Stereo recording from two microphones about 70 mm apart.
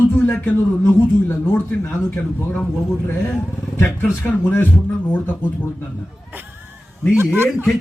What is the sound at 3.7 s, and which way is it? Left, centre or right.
Speech, left.